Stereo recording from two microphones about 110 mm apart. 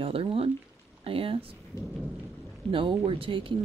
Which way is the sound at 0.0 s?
60° right (ahead or behind).